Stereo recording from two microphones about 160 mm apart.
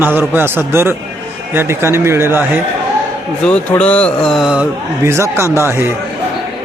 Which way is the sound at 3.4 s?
5° left (ahead or behind).